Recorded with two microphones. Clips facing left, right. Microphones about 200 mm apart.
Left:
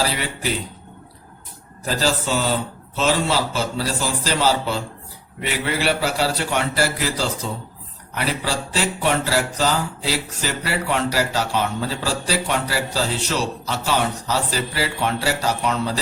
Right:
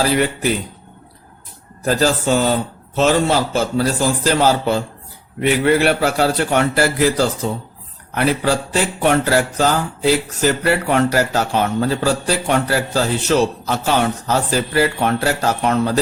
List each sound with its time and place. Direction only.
0.0 s speech: 55° right (ahead or behind)
1.8 s speech: 50° right (ahead or behind)